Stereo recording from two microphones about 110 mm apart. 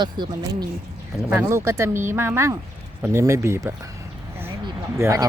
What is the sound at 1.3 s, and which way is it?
Speech, 20° right (ahead or behind).